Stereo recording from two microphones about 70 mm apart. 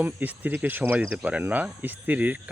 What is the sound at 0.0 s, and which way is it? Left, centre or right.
Speech, right.